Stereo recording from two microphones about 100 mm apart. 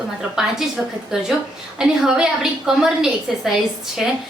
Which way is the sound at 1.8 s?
5° right (ahead or behind).